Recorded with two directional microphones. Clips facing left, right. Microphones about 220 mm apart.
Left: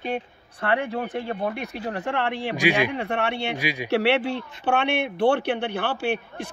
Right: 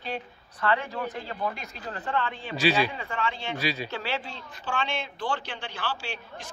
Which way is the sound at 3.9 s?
75° left (ahead or behind).